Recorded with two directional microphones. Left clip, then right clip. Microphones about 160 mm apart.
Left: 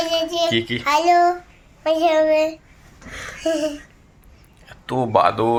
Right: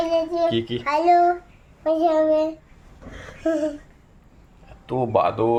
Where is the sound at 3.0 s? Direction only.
20° right (ahead or behind).